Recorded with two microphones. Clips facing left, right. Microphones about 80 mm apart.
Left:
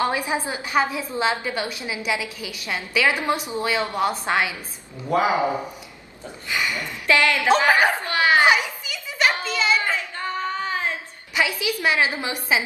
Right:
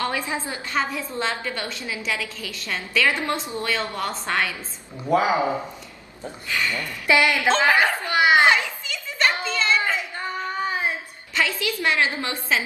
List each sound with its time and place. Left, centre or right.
0.0 s a woman's voice: centre
6.5 s a woman's voice: centre
7.1 s speech: centre
7.4 s a woman's voice: centre
8.1 s a sound: centre
8.5 s children playing: centre
9.9 s a sound: centre
11.3 s a woman's voice: centre